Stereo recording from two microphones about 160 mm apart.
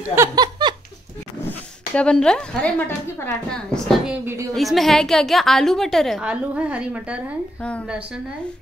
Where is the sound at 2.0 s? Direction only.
5° left (ahead or behind).